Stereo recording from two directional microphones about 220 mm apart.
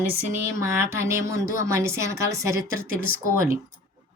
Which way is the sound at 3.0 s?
40° left (ahead or behind).